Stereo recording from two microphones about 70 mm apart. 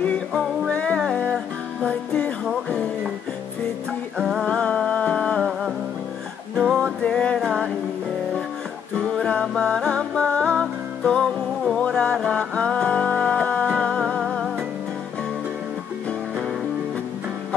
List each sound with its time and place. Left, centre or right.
0.7 s music: centre
4.2 s music: centre
4.6 s music: centre
7.0 s music: centre
7.3 s music: centre
8.9 s music: centre
14.2 s music: centre